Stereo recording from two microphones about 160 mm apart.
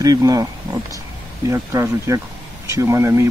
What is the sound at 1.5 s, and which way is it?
Speech, 20° right (ahead or behind).